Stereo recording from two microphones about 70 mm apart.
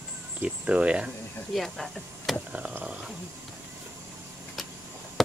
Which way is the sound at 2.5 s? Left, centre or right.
Right.